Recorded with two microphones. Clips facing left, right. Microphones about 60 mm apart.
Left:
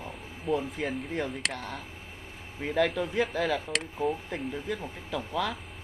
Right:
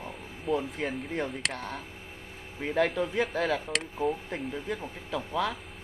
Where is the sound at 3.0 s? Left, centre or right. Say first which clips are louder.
Even; centre.